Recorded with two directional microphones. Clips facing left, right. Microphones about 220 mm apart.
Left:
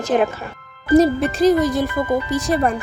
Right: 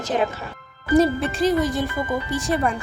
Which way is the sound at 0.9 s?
40° left (ahead or behind).